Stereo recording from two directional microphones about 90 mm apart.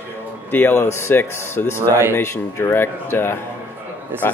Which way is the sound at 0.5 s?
25° left (ahead or behind).